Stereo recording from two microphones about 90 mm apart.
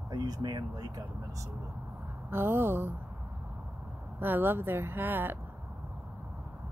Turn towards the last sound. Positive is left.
turn(degrees=-20)  # may be behind; listen again after turning